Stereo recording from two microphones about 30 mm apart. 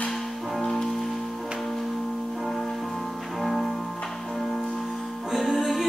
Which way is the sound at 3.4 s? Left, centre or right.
Centre.